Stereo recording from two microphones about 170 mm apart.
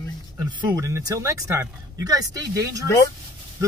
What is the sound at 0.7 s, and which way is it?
Speech, 20° right (ahead or behind).